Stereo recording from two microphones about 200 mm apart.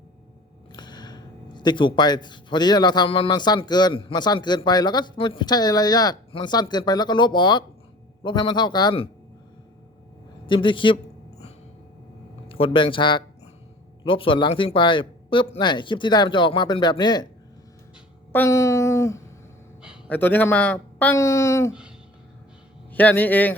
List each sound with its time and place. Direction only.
0.7 s speech: 20° left (ahead or behind)
10.4 s speech: 25° left (ahead or behind)
12.5 s speech: 25° left (ahead or behind)
18.3 s a sound: 10° left (ahead or behind)
20.1 s speech: 10° left (ahead or behind)
21.7 s a sound: 5° right (ahead or behind)
22.9 s speech: 10° left (ahead or behind)